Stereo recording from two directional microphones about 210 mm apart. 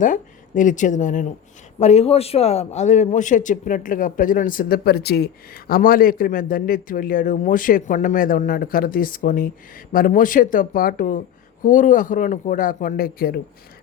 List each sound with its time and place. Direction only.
0.0 s a man's voice: 40° left (ahead or behind)